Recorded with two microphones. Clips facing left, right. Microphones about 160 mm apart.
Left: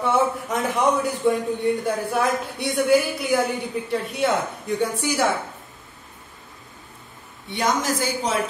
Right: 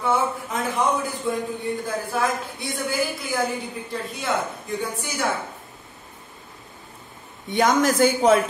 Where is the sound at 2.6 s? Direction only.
70° left (ahead or behind).